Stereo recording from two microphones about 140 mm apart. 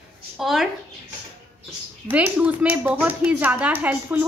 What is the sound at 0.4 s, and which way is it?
Speech, centre (ahead or behind).